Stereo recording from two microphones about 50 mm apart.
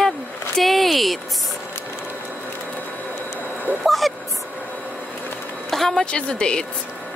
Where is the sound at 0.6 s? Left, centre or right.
Centre.